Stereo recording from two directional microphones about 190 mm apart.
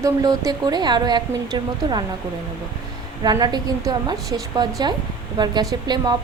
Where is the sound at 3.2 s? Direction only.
20° right (ahead or behind).